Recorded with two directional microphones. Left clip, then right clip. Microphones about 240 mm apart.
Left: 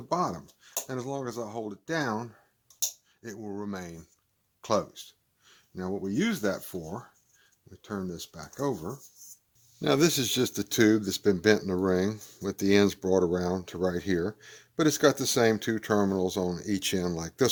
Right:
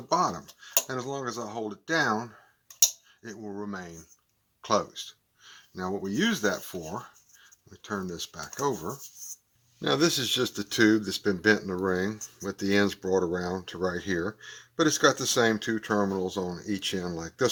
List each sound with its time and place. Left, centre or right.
0.1 s speech: left